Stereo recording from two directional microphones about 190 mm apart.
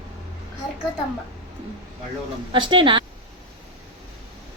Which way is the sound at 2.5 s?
25° right (ahead or behind).